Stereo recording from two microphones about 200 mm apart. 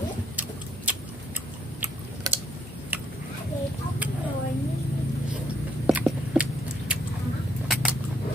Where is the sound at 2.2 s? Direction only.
20° right (ahead or behind).